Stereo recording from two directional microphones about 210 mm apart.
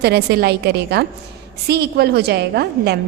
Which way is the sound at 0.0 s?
50° right (ahead or behind).